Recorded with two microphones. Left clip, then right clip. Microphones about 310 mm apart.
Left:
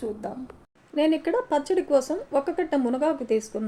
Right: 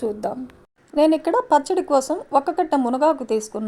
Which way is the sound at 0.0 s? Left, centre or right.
Right.